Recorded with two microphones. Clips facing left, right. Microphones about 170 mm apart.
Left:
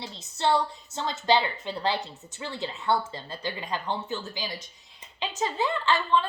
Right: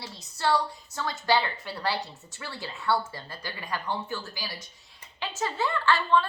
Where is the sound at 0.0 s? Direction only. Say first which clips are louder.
Left 2 dB; 20° left (ahead or behind).